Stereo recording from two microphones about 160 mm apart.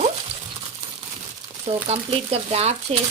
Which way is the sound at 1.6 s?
40° right (ahead or behind).